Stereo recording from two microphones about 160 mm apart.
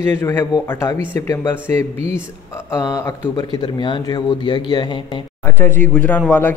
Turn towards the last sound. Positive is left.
turn(degrees=10)  # may be behind; listen again after turning